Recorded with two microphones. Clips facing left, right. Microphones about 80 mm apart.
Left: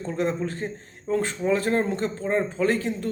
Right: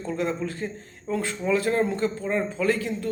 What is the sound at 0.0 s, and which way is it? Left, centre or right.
Speech, left.